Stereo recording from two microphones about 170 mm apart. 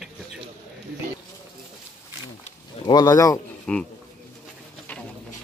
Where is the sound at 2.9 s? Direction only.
20° left (ahead or behind).